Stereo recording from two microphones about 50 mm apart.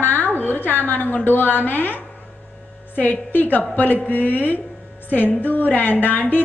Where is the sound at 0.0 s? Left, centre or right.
Left.